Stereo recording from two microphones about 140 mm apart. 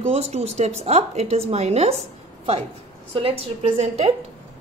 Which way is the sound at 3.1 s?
45° right (ahead or behind).